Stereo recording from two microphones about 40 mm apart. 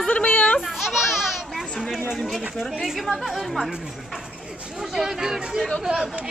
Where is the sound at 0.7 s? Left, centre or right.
Centre.